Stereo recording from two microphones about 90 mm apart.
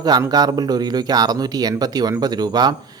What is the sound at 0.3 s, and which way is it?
A man's voice, 45° right (ahead or behind).